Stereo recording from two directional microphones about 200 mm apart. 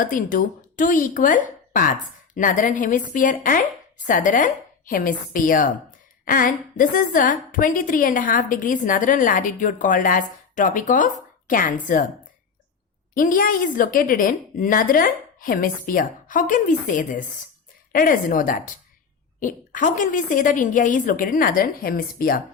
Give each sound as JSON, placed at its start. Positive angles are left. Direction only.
{"t": 0.0, "sound": "a woman's voice", "side_deg": 40}
{"t": 13.1, "sound": "a woman's voice", "side_deg": 45}